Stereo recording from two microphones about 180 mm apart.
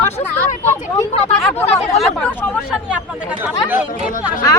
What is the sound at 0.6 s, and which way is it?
Speech, 10° left (ahead or behind).